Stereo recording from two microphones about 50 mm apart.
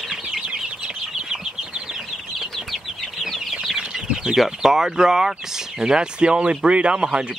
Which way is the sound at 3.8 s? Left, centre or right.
Centre.